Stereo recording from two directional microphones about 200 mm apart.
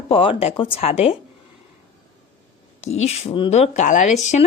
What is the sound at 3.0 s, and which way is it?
Speech, 30° left (ahead or behind).